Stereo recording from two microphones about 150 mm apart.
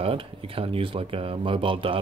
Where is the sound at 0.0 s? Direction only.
40° right (ahead or behind).